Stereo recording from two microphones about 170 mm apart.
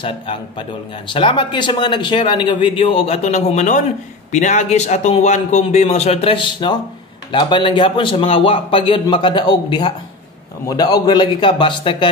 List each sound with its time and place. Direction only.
0.0 s a man's voice: 30° left (ahead or behind)